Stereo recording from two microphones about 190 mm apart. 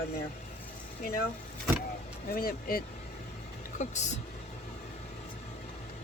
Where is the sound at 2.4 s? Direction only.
50° left (ahead or behind).